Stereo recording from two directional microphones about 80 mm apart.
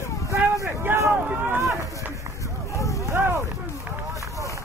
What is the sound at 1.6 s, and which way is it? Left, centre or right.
Run, right.